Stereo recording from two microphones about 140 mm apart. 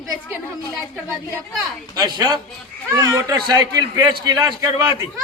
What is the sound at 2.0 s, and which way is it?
A man's voice, 30° right (ahead or behind).